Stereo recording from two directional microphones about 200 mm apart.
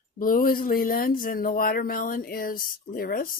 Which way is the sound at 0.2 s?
45° left (ahead or behind).